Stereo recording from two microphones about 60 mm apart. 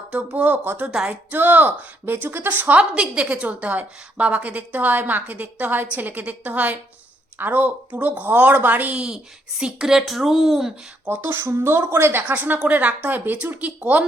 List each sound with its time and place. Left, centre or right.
0.1 s a woman's voice: right
0.9 s speech: centre
1.3 s a woman's voice: right
2.9 s a woman's voice: centre
8.9 s speech: centre
11.1 s a woman's voice: right